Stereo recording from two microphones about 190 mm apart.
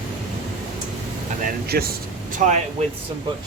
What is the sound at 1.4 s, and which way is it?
Speech, 55° right (ahead or behind).